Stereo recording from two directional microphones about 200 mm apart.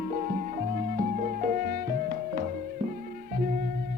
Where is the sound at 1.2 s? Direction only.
45° right (ahead or behind).